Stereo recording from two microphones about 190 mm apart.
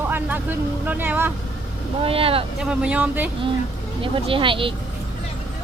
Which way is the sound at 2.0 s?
30° right (ahead or behind).